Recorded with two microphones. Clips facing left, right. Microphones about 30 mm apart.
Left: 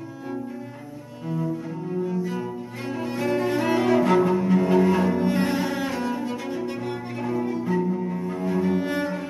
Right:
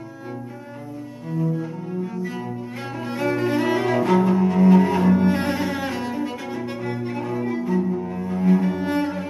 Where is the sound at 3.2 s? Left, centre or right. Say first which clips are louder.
Right 2 dB; centre.